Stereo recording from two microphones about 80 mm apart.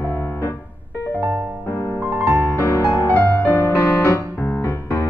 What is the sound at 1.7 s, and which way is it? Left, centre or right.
Music, left.